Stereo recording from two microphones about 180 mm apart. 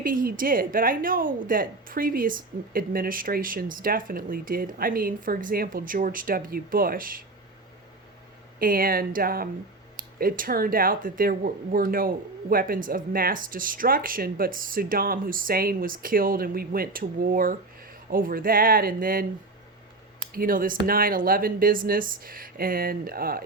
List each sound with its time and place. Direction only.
0.0 s speech: 50° right (ahead or behind)
8.5 s speech: 55° right (ahead or behind)
20.3 s speech: 50° right (ahead or behind)